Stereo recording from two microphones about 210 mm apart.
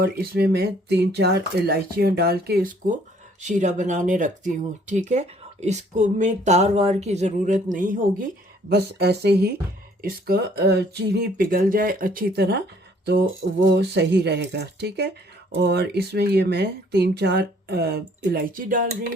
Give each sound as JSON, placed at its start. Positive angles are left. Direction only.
{"t": 0.0, "sound": "speech", "side_deg": -50}
{"t": 8.7, "sound": "speech", "side_deg": -50}
{"t": 13.7, "sound": "speech", "side_deg": -55}